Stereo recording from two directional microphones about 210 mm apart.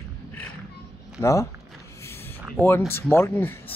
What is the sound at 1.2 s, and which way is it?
Speech, 15° left (ahead or behind).